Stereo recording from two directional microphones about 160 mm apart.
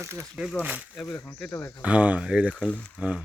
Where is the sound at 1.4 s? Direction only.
15° left (ahead or behind).